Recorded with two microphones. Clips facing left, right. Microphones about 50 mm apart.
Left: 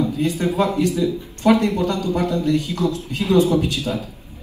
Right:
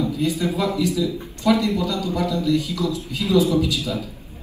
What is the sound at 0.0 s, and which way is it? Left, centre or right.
A man's voice, left.